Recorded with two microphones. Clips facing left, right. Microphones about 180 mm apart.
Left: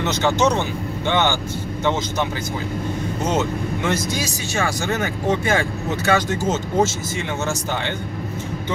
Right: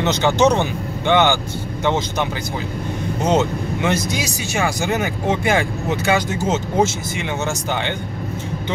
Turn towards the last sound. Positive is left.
turn(degrees=-15)  # may be behind; listen again after turning